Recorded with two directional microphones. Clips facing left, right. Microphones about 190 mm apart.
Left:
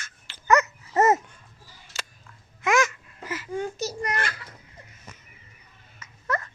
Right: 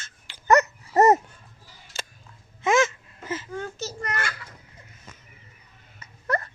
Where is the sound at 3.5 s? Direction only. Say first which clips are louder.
Left 4 dB; 15° left (ahead or behind).